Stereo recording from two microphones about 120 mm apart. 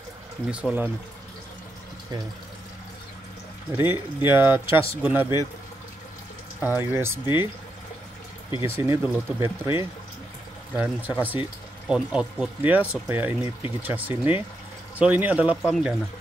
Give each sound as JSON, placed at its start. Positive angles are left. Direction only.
{"t": 0.5, "sound": "speech", "side_deg": -10}
{"t": 3.7, "sound": "speech", "side_deg": -20}
{"t": 6.6, "sound": "speech", "side_deg": -20}
{"t": 8.6, "sound": "speech", "side_deg": -20}